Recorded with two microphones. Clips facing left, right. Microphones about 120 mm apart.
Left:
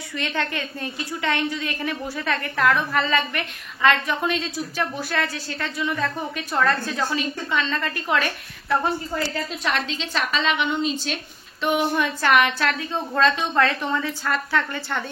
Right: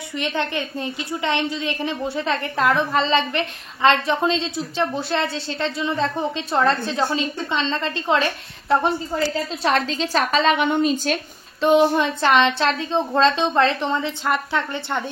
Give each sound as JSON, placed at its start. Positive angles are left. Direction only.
{"t": 0.1, "sound": "a woman's voice", "side_deg": -20}
{"t": 9.6, "sound": "a woman's voice", "side_deg": -35}
{"t": 11.6, "sound": "a woman's voice", "side_deg": -30}